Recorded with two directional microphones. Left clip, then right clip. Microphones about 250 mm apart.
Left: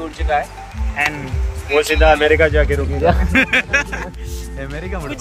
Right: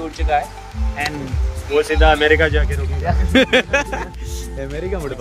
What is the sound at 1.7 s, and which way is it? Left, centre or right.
Speech, left.